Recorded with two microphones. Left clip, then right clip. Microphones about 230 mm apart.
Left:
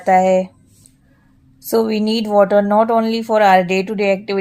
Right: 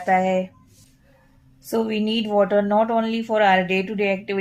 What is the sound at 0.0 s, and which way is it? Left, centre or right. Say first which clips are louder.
Speech: left 7 dB; left.